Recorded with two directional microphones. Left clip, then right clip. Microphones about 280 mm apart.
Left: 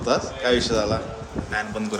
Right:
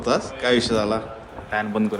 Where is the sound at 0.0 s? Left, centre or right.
Right.